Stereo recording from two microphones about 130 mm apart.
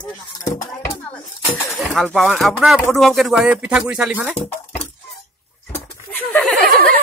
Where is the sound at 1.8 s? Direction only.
Centre (ahead or behind).